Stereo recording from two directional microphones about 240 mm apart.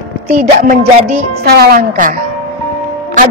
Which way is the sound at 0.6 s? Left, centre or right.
Right.